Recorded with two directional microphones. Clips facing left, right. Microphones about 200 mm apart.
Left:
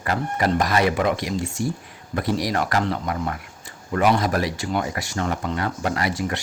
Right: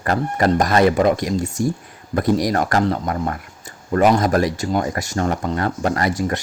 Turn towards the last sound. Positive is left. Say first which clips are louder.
# right 4 dB
turn(degrees=-45)  # may be behind; listen again after turning